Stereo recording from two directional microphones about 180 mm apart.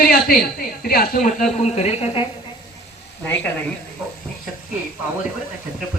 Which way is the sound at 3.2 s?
10° left (ahead or behind).